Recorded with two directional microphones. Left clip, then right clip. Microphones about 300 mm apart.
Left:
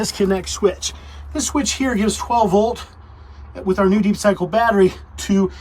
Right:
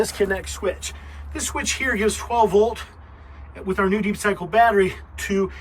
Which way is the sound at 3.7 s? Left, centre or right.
Centre.